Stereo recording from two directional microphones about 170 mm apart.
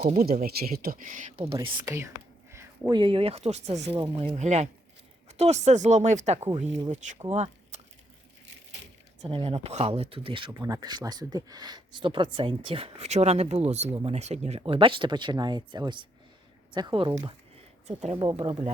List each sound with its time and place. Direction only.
0.1 s speech: 50° right (ahead or behind)
1.5 s speech: 20° right (ahead or behind)
2.5 s a sound: 15° right (ahead or behind)
3.0 s speech: 30° right (ahead or behind)
9.2 s speech: 35° right (ahead or behind)
14.6 s speech: 30° right (ahead or behind)
17.8 s speech: 40° right (ahead or behind)